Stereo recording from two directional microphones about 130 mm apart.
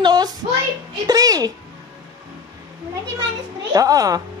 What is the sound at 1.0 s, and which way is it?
Speech, 30° right (ahead or behind).